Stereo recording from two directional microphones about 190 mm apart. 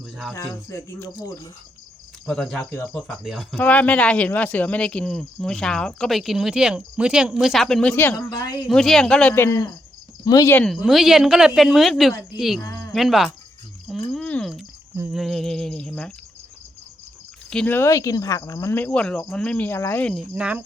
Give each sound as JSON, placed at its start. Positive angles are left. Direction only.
{"t": 0.0, "sound": "a sound", "side_deg": 0}
{"t": 0.3, "sound": "speech", "side_deg": 15}
{"t": 2.2, "sound": "speech", "side_deg": 5}
{"t": 8.6, "sound": "speech", "side_deg": 0}
{"t": 10.6, "sound": "speech", "side_deg": 0}
{"t": 13.8, "sound": "a sound", "side_deg": 0}
{"t": 15.1, "sound": "speech", "side_deg": 0}
{"t": 17.5, "sound": "speech", "side_deg": 5}
{"t": 20.3, "sound": "speech", "side_deg": -5}